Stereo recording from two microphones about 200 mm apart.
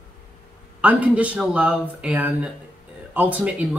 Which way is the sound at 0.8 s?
5° right (ahead or behind).